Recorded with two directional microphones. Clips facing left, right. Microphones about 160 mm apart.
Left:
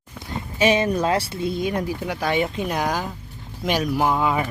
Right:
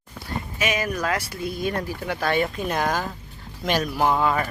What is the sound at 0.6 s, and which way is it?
Speech, 30° left (ahead or behind).